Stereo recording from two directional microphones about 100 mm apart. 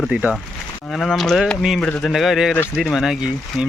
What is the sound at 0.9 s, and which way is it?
Speech, 5° left (ahead or behind).